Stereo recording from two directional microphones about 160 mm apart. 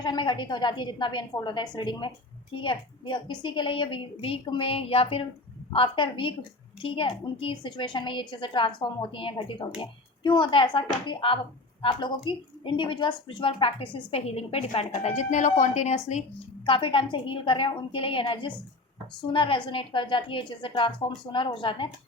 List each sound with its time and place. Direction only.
0.0 s a woman's voice: 30° left (ahead or behind); by 16.0 s 50° left (ahead or behind)
16.6 s a woman's voice: 30° left (ahead or behind)